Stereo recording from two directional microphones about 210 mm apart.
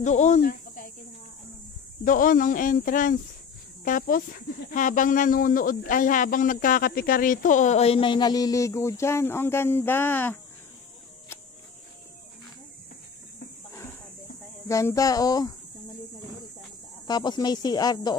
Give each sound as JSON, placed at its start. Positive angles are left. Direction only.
{"t": 0.0, "sound": "speech", "side_deg": 35}
{"t": 2.0, "sound": "speech", "side_deg": 40}
{"t": 14.7, "sound": "speech", "side_deg": 15}
{"t": 17.1, "sound": "speech", "side_deg": 20}